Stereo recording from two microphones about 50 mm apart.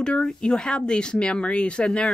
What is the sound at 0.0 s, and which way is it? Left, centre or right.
Speech, centre.